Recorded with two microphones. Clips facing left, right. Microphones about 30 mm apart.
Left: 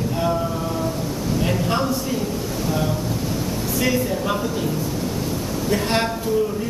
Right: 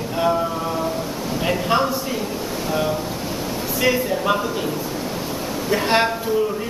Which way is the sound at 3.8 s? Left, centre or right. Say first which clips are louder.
Right 3 dB; centre.